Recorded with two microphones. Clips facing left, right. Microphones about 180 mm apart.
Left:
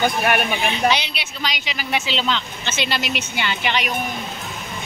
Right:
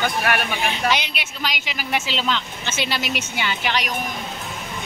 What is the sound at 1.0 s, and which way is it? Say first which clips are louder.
Speech: even; 50° right (ahead or behind).